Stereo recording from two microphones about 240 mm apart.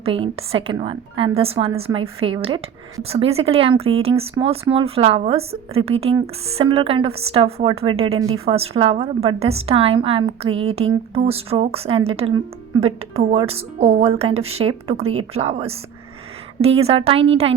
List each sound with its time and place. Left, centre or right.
0.0 s speech: right
15.0 s speech: right
15.3 s speech: right